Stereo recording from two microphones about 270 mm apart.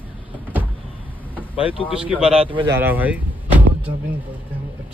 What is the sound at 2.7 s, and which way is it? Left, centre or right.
Vehicle, centre.